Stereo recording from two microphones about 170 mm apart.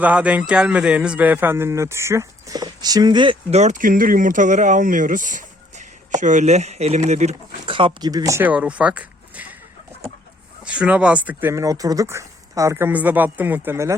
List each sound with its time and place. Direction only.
0.0 s speech: 10° right (ahead or behind); by 3.3 s 25° right (ahead or behind)
3.5 s speech: 45° right (ahead or behind); by 9.6 s 10° right (ahead or behind)
10.6 s speech: 5° right (ahead or behind)